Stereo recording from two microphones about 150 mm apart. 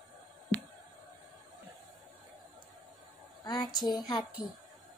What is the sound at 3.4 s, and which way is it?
A woman's voice, 30° left (ahead or behind).